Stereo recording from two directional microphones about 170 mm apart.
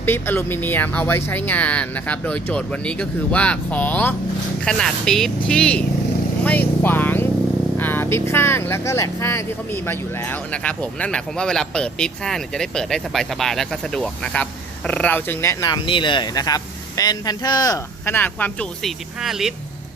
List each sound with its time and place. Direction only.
0.0 s speech: 10° left (ahead or behind)